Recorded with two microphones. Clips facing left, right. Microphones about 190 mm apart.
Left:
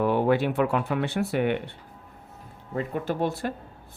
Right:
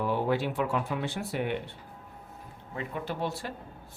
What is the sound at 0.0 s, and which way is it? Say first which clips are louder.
Speech: left 6 dB; 60° left (ahead or behind).